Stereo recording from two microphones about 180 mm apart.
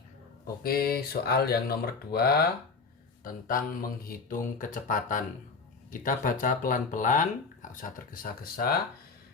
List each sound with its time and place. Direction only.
0.4 s speech: 55° left (ahead or behind)